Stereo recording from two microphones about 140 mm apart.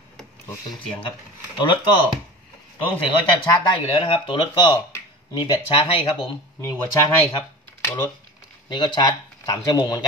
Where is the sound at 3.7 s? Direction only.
40° left (ahead or behind).